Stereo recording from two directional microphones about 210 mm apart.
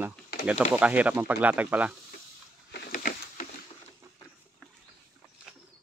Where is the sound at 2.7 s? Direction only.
45° left (ahead or behind).